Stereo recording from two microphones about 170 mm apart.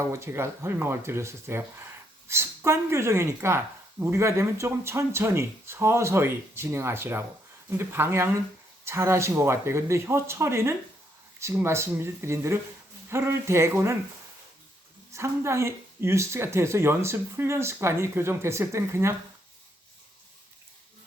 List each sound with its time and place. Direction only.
0.0 s speech: 15° right (ahead or behind)
15.1 s speech: 15° right (ahead or behind)